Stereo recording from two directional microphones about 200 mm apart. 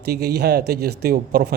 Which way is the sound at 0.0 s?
55° right (ahead or behind).